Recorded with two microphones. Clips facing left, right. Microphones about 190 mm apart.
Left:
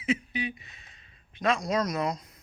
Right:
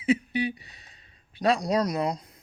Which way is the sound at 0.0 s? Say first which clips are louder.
Right 5 dB; 35° right (ahead or behind).